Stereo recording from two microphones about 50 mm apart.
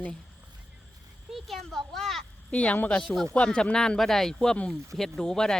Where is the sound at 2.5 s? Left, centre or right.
Left.